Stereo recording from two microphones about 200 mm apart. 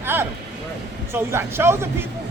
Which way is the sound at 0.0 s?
10° right (ahead or behind).